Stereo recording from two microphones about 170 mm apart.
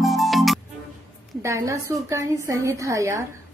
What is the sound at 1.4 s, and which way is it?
A woman's voice, 20° right (ahead or behind).